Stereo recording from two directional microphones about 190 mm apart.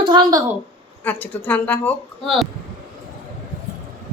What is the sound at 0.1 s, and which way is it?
Speech, 20° right (ahead or behind).